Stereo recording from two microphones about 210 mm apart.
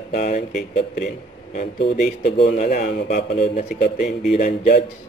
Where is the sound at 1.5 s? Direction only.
45° left (ahead or behind).